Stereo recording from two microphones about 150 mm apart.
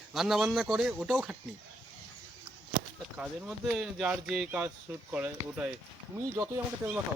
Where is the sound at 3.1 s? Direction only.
5° right (ahead or behind).